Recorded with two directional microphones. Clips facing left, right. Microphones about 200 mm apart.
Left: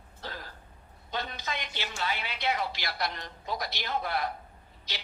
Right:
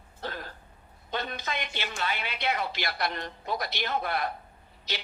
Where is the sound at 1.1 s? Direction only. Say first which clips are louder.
Right 2 dB; 60° right (ahead or behind).